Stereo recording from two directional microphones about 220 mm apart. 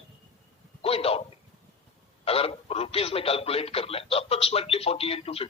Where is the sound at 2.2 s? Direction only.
25° left (ahead or behind).